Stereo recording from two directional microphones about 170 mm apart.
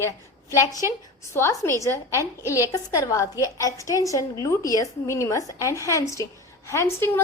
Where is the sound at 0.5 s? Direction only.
20° left (ahead or behind).